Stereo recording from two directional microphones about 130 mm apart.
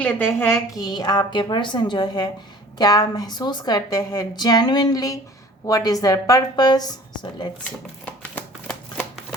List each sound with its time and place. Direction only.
0.0 s a woman's voice: 15° left (ahead or behind)
0.8 s a woman's voice: 30° left (ahead or behind)
8.2 s shuffling cards: 10° left (ahead or behind)